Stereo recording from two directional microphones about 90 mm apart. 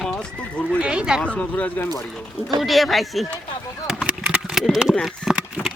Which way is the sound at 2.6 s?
Centre (ahead or behind).